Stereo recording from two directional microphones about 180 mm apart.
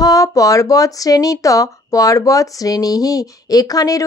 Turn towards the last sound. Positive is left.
turn(degrees=20)  # may be behind; listen again after turning